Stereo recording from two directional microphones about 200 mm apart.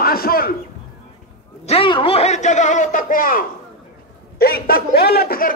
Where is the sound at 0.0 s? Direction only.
45° left (ahead or behind).